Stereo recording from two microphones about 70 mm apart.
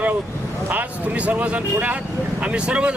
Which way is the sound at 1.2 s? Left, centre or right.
Centre.